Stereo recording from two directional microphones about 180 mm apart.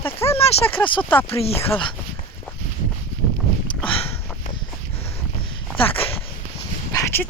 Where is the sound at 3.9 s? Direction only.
30° left (ahead or behind).